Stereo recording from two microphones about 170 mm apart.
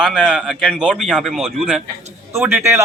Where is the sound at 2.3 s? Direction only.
15° right (ahead or behind).